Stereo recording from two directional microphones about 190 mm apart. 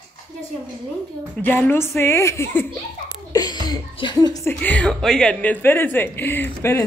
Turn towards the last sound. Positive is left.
turn(degrees=10)  # may be behind; listen again after turning